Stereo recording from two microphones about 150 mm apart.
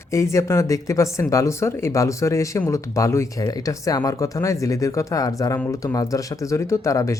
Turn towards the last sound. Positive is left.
turn(degrees=20)  # may be behind; listen again after turning